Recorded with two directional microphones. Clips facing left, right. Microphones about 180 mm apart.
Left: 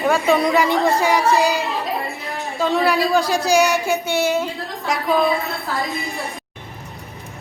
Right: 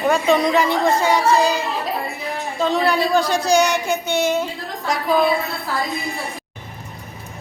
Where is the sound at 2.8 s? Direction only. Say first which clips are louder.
Even; centre (ahead or behind).